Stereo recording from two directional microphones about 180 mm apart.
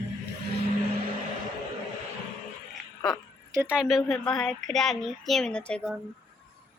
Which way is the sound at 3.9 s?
Centre (ahead or behind).